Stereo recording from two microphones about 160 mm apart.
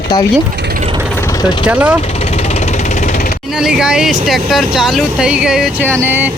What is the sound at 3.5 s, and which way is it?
Speech, 5° right (ahead or behind).